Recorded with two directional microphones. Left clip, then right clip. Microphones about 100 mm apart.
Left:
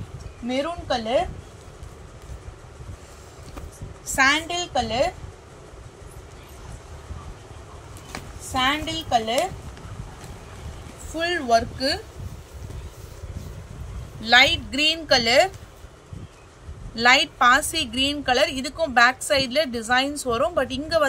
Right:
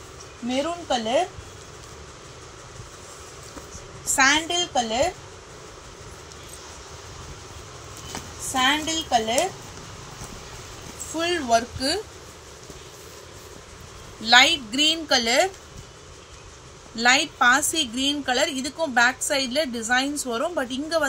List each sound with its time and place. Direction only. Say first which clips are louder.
0.5 s a woman's voice: even; 20° left (ahead or behind)
4.1 s a woman's voice: even; 25° left (ahead or behind)
8.5 s a woman's voice: right 1 dB; 20° left (ahead or behind)
11.1 s speech: left 1 dB; 40° left (ahead or behind)
14.2 s a woman's voice: even; 55° left (ahead or behind)
16.9 s a woman's voice: left 2 dB; 45° left (ahead or behind)